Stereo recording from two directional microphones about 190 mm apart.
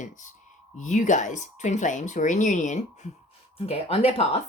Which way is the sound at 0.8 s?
40° left (ahead or behind).